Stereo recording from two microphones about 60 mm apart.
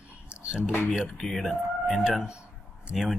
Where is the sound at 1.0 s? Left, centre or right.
Centre.